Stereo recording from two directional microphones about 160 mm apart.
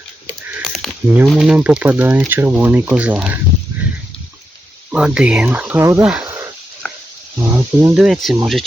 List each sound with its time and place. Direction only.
0.6 s a sound: centre (ahead or behind)
1.1 s speech: 5° right (ahead or behind)
4.9 s speech: 5° right (ahead or behind)
6.8 s a sound: 10° left (ahead or behind)
7.3 s speech: 15° right (ahead or behind)
7.9 s speech: centre (ahead or behind)